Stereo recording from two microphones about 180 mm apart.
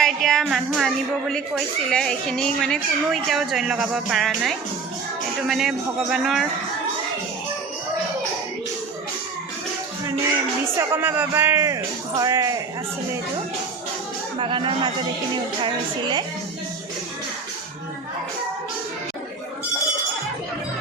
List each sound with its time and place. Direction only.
0.0 s a woman's voice: centre (ahead or behind)
10.8 s speech: 10° right (ahead or behind)
14.3 s a woman's voice: 30° right (ahead or behind)